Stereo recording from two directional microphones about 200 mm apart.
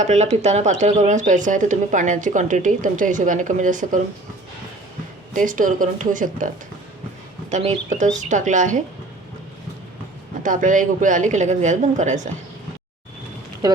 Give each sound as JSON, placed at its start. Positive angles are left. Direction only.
{"t": 0.0, "sound": "speech", "side_deg": -35}
{"t": 5.3, "sound": "speech", "side_deg": -40}
{"t": 7.5, "sound": "speech", "side_deg": -35}
{"t": 10.4, "sound": "speech", "side_deg": -40}
{"t": 13.6, "sound": "speech", "side_deg": -20}